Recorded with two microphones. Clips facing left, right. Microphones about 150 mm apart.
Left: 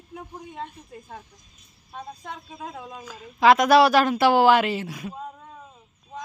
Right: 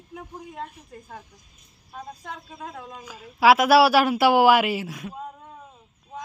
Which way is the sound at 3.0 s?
10° right (ahead or behind).